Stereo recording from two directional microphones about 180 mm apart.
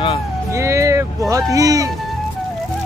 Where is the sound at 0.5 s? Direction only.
15° right (ahead or behind).